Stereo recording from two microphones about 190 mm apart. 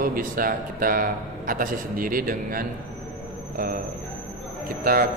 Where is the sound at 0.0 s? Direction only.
50° right (ahead or behind).